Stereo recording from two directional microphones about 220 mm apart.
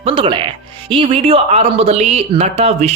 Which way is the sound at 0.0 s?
25° right (ahead or behind).